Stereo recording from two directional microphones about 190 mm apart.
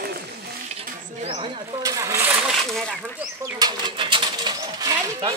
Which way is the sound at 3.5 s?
25° right (ahead or behind).